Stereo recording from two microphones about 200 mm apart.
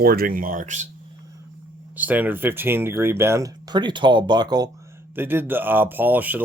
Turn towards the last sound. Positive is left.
turn(degrees=-10)  # may be behind; listen again after turning